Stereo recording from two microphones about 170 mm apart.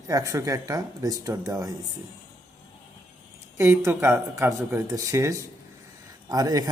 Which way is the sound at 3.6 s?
15° right (ahead or behind).